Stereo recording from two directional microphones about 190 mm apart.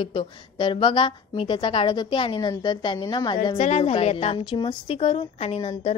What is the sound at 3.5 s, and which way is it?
A woman's voice, 35° left (ahead or behind).